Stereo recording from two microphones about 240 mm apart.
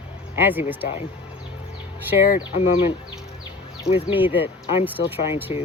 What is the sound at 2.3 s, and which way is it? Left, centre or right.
Speech, left.